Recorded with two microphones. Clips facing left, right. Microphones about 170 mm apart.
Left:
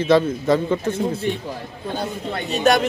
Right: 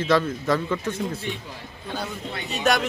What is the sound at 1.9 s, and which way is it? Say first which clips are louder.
Speech: left 5 dB; 30° left (ahead or behind).